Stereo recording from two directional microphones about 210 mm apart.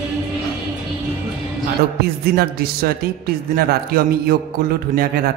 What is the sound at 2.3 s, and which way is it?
A man's voice, 45° right (ahead or behind).